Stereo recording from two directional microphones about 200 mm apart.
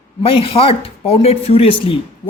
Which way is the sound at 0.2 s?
25° left (ahead or behind).